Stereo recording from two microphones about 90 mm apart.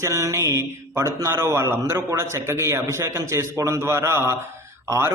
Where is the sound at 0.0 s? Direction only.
35° right (ahead or behind).